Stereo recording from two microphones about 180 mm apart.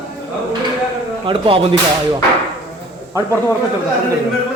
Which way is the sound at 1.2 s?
30° right (ahead or behind).